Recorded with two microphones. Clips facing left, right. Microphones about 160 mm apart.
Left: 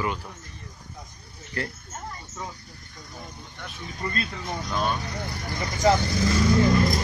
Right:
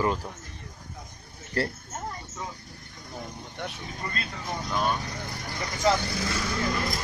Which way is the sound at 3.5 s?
60° right (ahead or behind).